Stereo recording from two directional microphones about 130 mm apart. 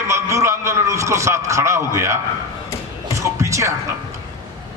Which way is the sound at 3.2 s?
25° right (ahead or behind).